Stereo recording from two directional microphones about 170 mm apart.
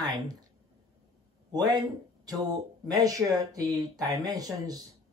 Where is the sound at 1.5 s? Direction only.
25° right (ahead or behind).